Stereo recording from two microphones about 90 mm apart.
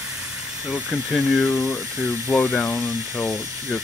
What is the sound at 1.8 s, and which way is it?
Speech, 30° right (ahead or behind).